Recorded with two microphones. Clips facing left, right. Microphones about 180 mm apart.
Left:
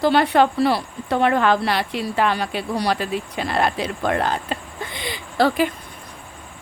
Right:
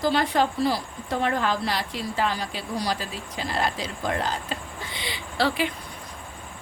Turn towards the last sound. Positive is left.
turn(degrees=45)  # may be behind; listen again after turning